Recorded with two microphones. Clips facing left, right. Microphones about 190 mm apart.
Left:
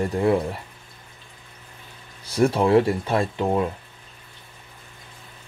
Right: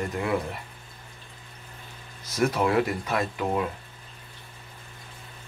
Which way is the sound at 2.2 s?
30° left (ahead or behind).